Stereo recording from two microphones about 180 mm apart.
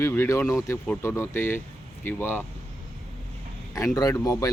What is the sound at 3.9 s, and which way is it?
Speech, 20° left (ahead or behind).